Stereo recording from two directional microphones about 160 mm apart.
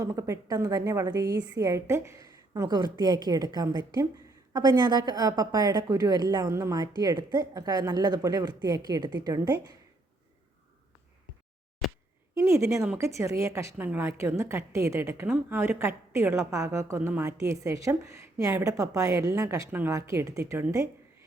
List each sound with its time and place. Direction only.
0.0 s a woman's voice: 20° right (ahead or behind)
12.4 s a woman's voice: 20° right (ahead or behind)